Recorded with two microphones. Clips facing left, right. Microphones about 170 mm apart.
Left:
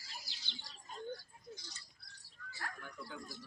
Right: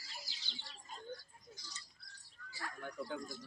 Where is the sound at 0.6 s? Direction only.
40° left (ahead or behind).